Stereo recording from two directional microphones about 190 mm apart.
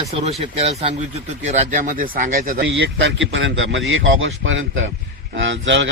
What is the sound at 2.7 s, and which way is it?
A man's voice, 75° right (ahead or behind).